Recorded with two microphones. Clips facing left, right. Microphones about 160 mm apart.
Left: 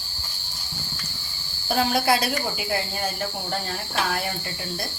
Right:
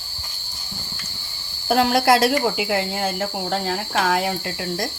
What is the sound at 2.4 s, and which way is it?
Speech, 75° right (ahead or behind).